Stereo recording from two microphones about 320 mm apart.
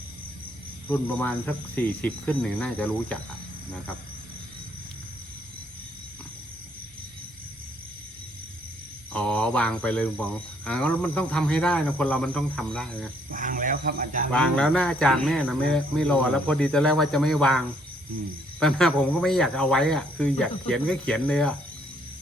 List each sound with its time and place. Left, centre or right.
0.9 s speech: centre
9.1 s speech: centre
13.3 s speech: right
14.3 s speech: centre